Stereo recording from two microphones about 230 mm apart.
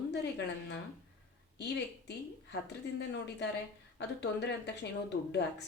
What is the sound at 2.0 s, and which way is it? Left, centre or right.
Speech, left.